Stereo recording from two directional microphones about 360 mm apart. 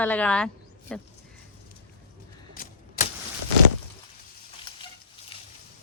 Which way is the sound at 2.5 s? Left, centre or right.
Left.